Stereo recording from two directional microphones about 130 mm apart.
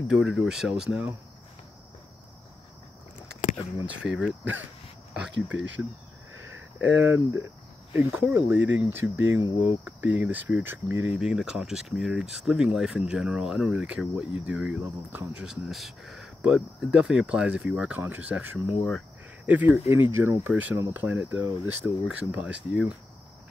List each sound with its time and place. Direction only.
0.1 s speech: 5° right (ahead or behind)
3.8 s speech: 10° right (ahead or behind)
6.8 s speech: 15° right (ahead or behind)
11.1 s speech: 5° right (ahead or behind)